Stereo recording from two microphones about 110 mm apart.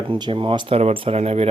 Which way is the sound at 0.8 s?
75° right (ahead or behind).